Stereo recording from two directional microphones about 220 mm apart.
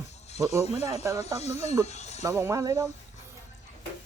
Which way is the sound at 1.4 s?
30° left (ahead or behind).